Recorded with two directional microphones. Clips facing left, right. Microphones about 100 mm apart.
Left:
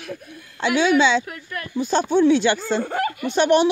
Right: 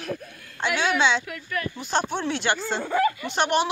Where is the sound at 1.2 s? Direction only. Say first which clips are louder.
Right 2 dB; 40° left (ahead or behind).